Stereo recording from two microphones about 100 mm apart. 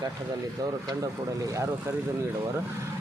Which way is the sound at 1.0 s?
35° right (ahead or behind).